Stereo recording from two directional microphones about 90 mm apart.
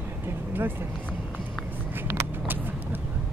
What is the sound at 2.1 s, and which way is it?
Vehicle, 25° right (ahead or behind).